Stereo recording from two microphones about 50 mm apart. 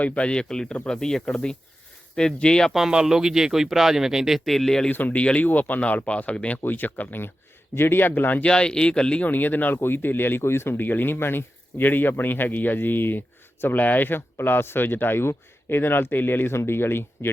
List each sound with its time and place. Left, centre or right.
0.0 s speech: left
0.3 s speech: centre
2.7 s speech: centre
4.4 s speech: centre
4.9 s speech: left
5.2 s speech: left
5.5 s speech: left
6.6 s speech: left
7.8 s speech: left
8.4 s speech: centre
9.2 s speech: left
9.7 s speech: left
10.8 s speech: left